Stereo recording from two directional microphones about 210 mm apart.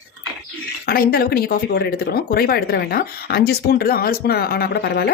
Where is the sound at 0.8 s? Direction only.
45° left (ahead or behind).